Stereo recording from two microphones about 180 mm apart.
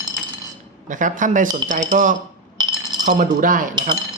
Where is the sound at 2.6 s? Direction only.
25° right (ahead or behind).